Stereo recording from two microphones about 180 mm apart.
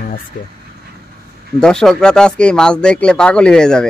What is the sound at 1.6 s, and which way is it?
Speech, 5° left (ahead or behind).